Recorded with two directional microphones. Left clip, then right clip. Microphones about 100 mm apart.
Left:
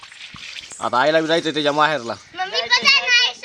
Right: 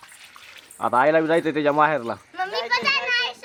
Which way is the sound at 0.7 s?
25° right (ahead or behind).